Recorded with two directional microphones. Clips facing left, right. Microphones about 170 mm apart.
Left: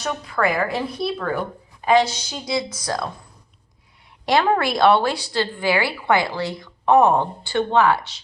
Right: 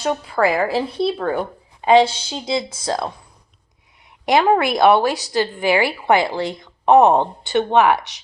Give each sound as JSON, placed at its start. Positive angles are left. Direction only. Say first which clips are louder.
{"t": 0.0, "sound": "speech", "louder": "right 4 dB", "side_deg": -30}
{"t": 4.3, "sound": "speech", "louder": "right 3 dB", "side_deg": -20}